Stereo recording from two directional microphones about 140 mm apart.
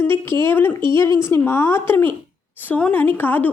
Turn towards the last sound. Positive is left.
turn(degrees=10)  # may be behind; listen again after turning